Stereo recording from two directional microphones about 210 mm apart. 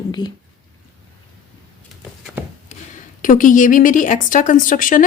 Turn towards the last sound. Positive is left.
turn(degrees=40)  # may be behind; listen again after turning